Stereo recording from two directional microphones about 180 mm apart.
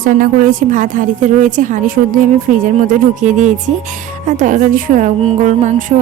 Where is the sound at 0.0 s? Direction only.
50° right (ahead or behind).